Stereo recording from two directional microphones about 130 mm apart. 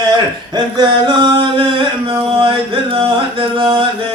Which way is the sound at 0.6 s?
40° right (ahead or behind).